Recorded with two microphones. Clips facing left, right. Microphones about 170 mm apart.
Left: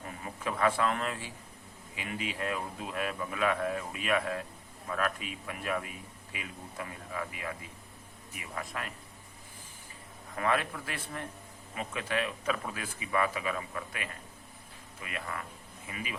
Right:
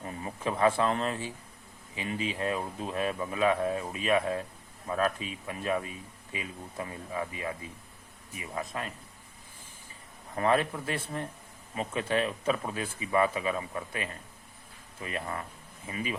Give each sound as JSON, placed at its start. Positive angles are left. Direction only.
{"t": 0.0, "sound": "a man's voice", "side_deg": -25}
{"t": 10.3, "sound": "speech", "side_deg": -30}